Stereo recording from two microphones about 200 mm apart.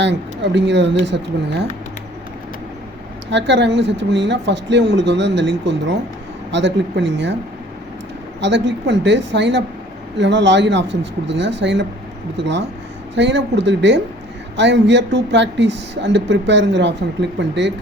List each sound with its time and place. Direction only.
0.0 s a woman's voice: 60° right (ahead or behind)
3.2 s a woman's voice: 60° right (ahead or behind)
8.4 s a woman's voice: 60° right (ahead or behind)